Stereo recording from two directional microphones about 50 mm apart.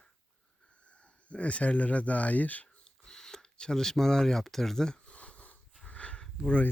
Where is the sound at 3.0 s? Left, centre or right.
Centre.